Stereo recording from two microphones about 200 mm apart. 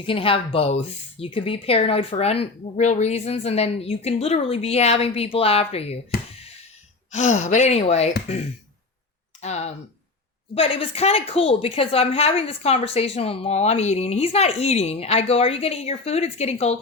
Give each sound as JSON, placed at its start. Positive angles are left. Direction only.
{"t": 0.0, "sound": "speech", "side_deg": 25}
{"t": 7.1, "sound": "a woman's voice", "side_deg": 35}
{"t": 9.4, "sound": "a woman's voice", "side_deg": 35}